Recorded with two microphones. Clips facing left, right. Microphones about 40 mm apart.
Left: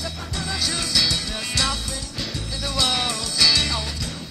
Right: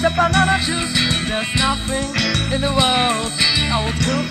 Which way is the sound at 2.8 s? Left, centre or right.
Right.